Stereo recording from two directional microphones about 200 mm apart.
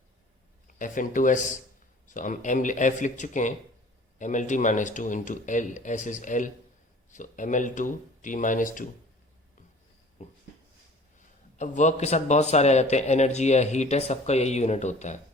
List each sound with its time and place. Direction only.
0.8 s a man's voice: 40° left (ahead or behind)
10.2 s a sound: 35° left (ahead or behind)
11.5 s a man's voice: 35° left (ahead or behind)